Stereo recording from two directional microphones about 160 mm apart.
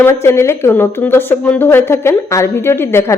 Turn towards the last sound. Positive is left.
turn(degrees=15)  # may be behind; listen again after turning